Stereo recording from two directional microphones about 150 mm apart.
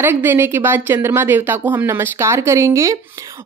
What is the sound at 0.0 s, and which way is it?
A woman's voice, 15° right (ahead or behind).